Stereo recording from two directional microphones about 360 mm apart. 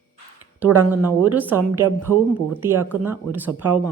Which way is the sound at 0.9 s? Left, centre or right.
Centre.